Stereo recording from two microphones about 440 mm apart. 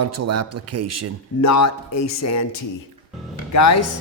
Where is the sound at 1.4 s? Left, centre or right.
Left.